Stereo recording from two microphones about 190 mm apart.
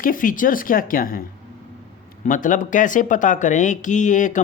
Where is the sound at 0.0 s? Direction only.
45° left (ahead or behind).